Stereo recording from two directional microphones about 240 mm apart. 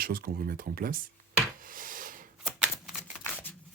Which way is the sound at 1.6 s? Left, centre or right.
Right.